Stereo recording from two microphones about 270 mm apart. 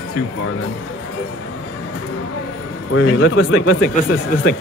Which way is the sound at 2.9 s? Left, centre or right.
Left.